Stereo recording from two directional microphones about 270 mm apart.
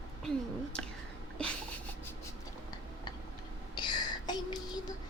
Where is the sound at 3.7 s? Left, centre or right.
Centre.